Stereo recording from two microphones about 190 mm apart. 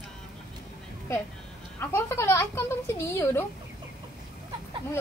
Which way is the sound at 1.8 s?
15° left (ahead or behind).